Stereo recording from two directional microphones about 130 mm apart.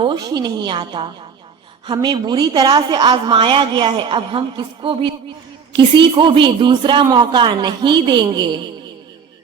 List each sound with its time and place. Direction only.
0.0 s a woman's voice: 35° right (ahead or behind)